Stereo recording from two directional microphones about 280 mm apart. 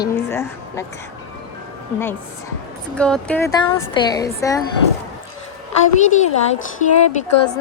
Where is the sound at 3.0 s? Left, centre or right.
Centre.